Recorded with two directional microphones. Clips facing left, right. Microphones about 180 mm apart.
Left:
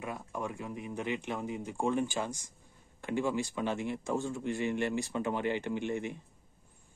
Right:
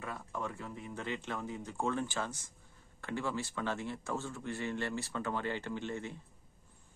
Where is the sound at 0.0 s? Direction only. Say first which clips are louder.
Left 3 dB; 15° left (ahead or behind).